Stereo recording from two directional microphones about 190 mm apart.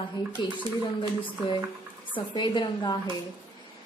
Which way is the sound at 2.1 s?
25° left (ahead or behind).